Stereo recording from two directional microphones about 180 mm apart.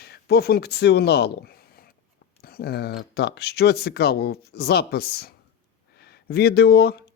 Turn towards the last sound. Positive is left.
turn(degrees=65)  # may be behind; listen again after turning